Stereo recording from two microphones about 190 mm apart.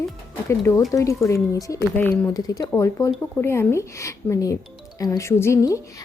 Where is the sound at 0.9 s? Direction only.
15° left (ahead or behind).